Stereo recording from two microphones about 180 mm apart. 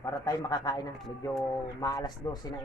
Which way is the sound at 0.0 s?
20° left (ahead or behind).